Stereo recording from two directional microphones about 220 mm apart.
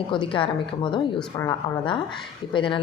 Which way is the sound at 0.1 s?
25° left (ahead or behind).